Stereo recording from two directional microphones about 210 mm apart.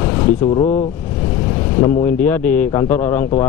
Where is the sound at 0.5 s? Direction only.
30° left (ahead or behind).